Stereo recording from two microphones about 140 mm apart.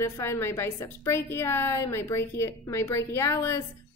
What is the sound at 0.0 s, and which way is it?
A woman's voice, 20° left (ahead or behind).